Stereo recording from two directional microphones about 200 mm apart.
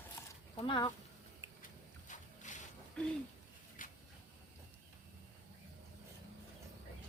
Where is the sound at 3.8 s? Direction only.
40° left (ahead or behind).